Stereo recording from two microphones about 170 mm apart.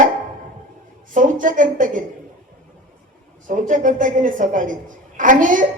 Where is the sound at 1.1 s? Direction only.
50° right (ahead or behind).